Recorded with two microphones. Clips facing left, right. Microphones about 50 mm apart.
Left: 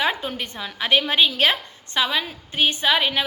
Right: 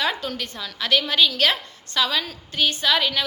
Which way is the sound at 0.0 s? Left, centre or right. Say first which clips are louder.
Left 2 dB; left.